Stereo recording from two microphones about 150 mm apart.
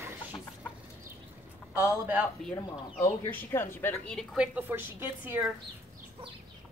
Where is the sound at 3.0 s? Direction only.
15° left (ahead or behind).